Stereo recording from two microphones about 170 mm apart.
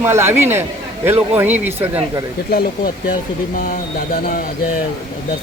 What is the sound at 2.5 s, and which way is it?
Speech, 60° left (ahead or behind).